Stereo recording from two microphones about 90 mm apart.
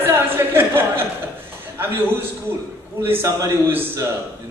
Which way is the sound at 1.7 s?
25° right (ahead or behind).